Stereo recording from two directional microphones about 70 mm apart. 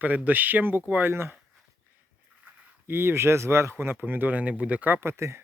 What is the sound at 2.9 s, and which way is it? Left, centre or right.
Speech, right.